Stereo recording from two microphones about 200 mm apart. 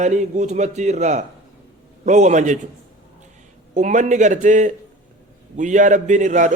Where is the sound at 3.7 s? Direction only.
35° right (ahead or behind).